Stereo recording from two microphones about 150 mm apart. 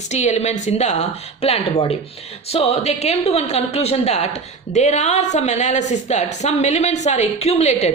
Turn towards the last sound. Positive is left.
turn(degrees=50)  # may be behind; listen again after turning